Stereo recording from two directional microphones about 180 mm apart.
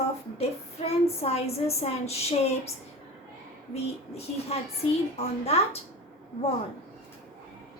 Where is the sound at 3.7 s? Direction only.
35° left (ahead or behind).